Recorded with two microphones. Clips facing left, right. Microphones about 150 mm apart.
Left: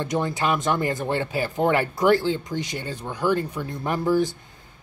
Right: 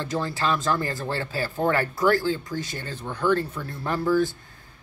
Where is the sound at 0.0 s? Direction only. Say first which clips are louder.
Left 2 dB; 20° left (ahead or behind).